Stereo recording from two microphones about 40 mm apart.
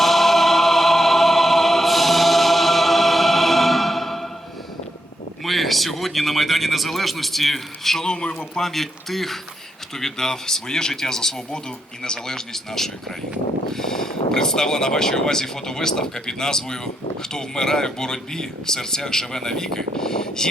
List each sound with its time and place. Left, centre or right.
0.0 s choir: centre
5.5 s speech: centre
8.0 s a man's voice: left
8.6 s speech: centre